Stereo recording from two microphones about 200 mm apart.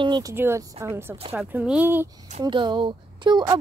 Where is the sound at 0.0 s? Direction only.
20° right (ahead or behind).